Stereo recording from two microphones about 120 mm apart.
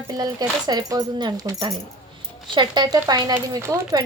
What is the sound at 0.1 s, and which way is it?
A woman's voice, 35° right (ahead or behind).